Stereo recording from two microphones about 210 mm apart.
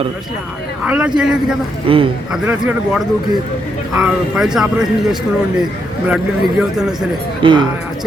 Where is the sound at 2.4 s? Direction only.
5° right (ahead or behind).